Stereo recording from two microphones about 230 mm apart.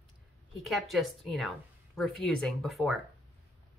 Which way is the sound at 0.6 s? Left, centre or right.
Centre.